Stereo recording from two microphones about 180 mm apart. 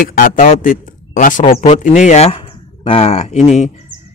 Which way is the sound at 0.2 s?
45° left (ahead or behind).